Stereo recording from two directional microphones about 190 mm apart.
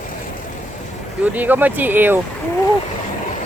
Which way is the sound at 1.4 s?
10° right (ahead or behind).